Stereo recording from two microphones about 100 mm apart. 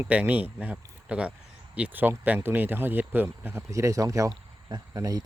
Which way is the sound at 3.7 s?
35° right (ahead or behind).